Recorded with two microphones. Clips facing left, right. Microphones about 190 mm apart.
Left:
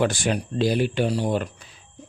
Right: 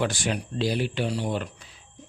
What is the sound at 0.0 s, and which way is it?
Speech, 50° left (ahead or behind).